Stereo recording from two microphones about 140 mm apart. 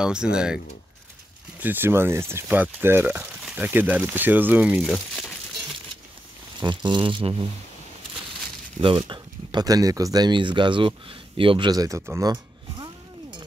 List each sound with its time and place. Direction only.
0.0 s speech: 5° right (ahead or behind)
1.6 s speech: 15° right (ahead or behind)
4.8 s speech: 5° left (ahead or behind)
6.6 s speech: 35° right (ahead or behind)
8.8 s speech: 35° right (ahead or behind)
12.1 s a sound: 25° right (ahead or behind)